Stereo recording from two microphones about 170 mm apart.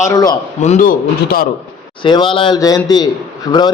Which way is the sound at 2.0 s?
30° left (ahead or behind).